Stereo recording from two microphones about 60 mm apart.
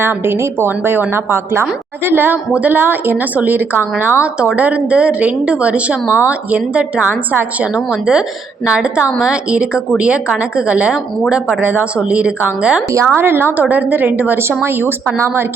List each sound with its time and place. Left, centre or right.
0.0 s a woman's voice: right
7.9 s a woman's voice: centre
13.1 s a woman's voice: right